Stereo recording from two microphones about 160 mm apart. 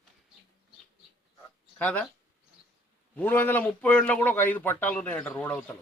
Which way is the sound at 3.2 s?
10° left (ahead or behind).